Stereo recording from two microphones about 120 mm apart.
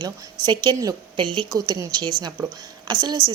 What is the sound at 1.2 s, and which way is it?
Speech, 40° right (ahead or behind).